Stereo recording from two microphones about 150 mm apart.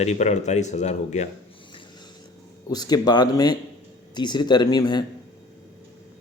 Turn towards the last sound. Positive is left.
turn(degrees=25)  # may be behind; listen again after turning